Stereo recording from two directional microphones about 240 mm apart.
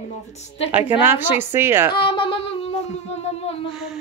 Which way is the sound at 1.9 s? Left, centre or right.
Left.